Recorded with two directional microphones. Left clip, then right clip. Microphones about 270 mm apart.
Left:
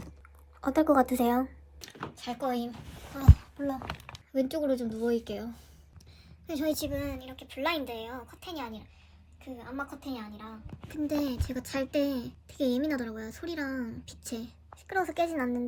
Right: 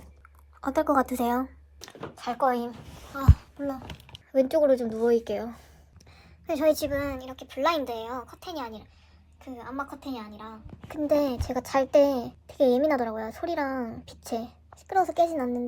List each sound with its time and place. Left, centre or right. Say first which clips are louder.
0.6 s a child's voice: even; centre
6.2 s a sound: right 8 dB; centre
6.8 s speech: right 6 dB; centre
10.0 s a child's voice: right 3 dB; centre
15.3 s a child's voice: right 3 dB; centre